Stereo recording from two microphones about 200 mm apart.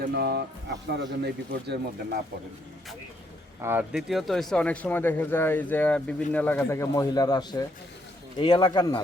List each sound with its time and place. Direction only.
0.1 s speech: 55° right (ahead or behind)
3.6 s a man's voice: 10° right (ahead or behind); by 9.0 s 20° left (ahead or behind)